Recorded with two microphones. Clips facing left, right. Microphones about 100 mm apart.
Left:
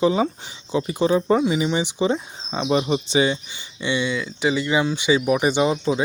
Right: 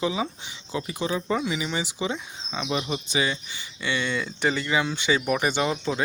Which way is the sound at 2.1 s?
35° left (ahead or behind).